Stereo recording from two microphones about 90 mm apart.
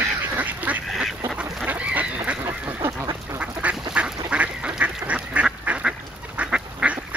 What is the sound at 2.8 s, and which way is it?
Duck, 35° right (ahead or behind).